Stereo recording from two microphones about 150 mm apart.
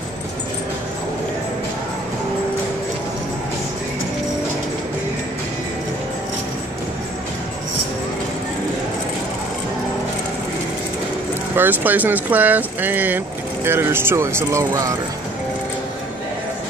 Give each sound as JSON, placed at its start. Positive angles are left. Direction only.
{"t": 11.5, "sound": "speech", "side_deg": -10}